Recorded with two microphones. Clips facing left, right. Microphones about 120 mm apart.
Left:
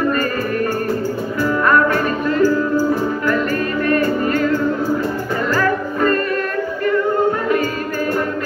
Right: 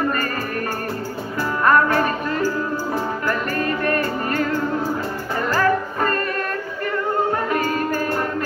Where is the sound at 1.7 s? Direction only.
35° right (ahead or behind).